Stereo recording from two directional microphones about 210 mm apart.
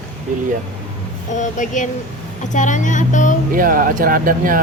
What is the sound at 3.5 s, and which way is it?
Speech, 40° right (ahead or behind).